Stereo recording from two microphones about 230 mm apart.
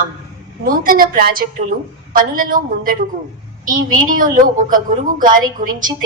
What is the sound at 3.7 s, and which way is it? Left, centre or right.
Speech, right.